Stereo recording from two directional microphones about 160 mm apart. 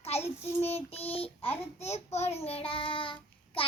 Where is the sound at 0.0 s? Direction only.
40° left (ahead or behind).